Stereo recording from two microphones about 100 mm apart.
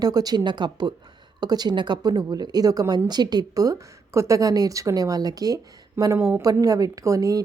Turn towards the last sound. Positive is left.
turn(degrees=-35)  # may be behind; listen again after turning